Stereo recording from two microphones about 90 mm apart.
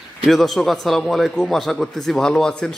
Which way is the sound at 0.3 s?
Centre (ahead or behind).